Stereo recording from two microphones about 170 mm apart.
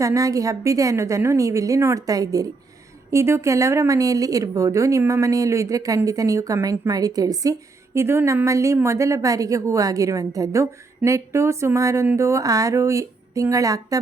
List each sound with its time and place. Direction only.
0.0 s a woman's voice: 20° right (ahead or behind)